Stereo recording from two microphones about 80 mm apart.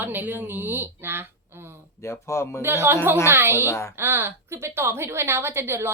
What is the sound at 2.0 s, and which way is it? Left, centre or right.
Speech, left.